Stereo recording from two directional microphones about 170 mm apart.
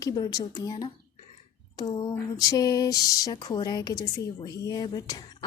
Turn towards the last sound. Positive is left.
turn(degrees=25)  # may be behind; listen again after turning